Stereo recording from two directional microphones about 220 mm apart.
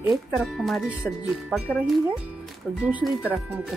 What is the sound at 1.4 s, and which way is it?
Speech, 5° right (ahead or behind).